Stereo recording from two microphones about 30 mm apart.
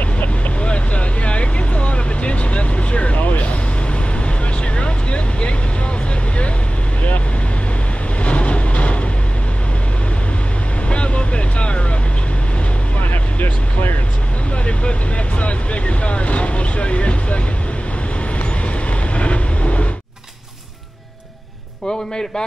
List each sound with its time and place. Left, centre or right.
0.6 s vehicle: left
4.7 s vehicle: left
8.2 s vehicle: left
10.9 s vehicle: left
14.7 s vehicle: left
18.9 s vehicle: left